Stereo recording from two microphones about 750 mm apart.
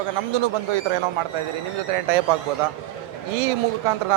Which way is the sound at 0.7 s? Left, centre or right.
Right.